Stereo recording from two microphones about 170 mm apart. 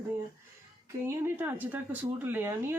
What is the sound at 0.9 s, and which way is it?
Speech, 15° right (ahead or behind).